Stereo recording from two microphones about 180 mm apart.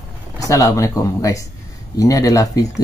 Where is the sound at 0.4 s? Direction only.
15° left (ahead or behind).